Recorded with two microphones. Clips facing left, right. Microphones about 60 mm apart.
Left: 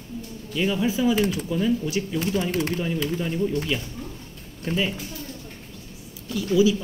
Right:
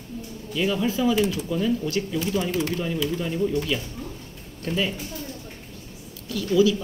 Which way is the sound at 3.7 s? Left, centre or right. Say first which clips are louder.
Even; centre.